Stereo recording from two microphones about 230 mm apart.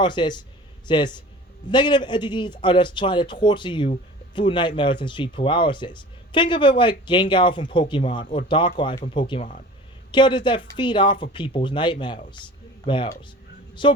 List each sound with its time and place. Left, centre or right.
0.0 s speech: centre